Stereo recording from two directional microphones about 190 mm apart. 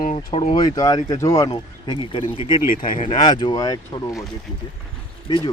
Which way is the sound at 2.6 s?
45° left (ahead or behind).